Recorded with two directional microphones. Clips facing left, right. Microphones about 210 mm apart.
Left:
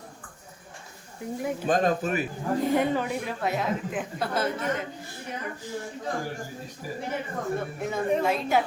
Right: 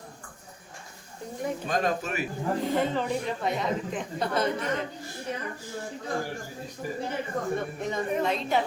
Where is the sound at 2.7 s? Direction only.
10° left (ahead or behind).